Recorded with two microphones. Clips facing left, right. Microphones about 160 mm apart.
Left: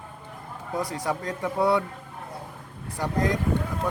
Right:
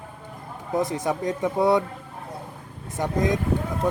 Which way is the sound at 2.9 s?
20° right (ahead or behind).